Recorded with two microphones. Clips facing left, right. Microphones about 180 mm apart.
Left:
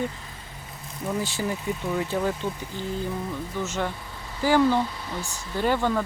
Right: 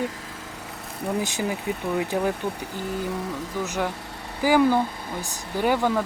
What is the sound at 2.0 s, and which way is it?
Speech, 10° right (ahead or behind).